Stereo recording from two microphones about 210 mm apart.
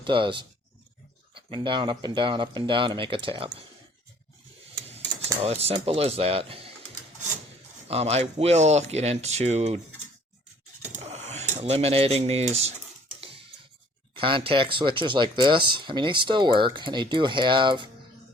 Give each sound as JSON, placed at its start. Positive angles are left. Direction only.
{"t": 0.0, "sound": "speech", "side_deg": -25}
{"t": 4.9, "sound": "speech", "side_deg": -30}
{"t": 7.9, "sound": "speech", "side_deg": -30}
{"t": 10.9, "sound": "a sound", "side_deg": -30}
{"t": 11.5, "sound": "speech", "side_deg": -30}
{"t": 14.2, "sound": "speech", "side_deg": -25}